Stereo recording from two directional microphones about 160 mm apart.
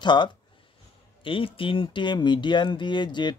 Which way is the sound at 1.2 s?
35° left (ahead or behind).